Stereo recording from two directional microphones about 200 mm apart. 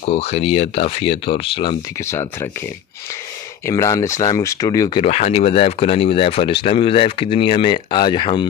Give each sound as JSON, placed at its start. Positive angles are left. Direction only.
{"t": 0.1, "sound": "speech", "side_deg": 30}
{"t": 2.0, "sound": "speech", "side_deg": 15}
{"t": 3.6, "sound": "speech", "side_deg": 15}